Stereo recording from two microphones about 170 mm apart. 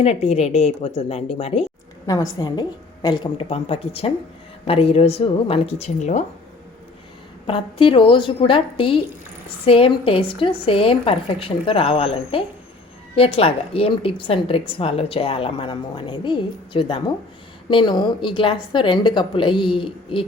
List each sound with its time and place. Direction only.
0.0 s a woman's voice: 40° left (ahead or behind)
2.0 s a woman's voice: 20° left (ahead or behind); by 6.2 s 40° left (ahead or behind)
7.4 s a woman's voice: 30° left (ahead or behind)